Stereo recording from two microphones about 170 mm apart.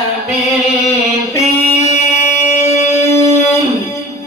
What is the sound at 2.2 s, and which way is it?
Music, 40° left (ahead or behind).